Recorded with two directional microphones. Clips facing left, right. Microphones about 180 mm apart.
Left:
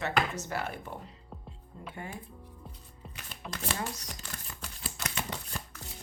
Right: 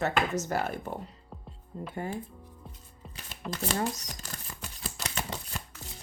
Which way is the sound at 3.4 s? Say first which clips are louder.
Right 5 dB; centre (ahead or behind).